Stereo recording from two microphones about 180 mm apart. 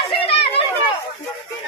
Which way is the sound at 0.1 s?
30° left (ahead or behind).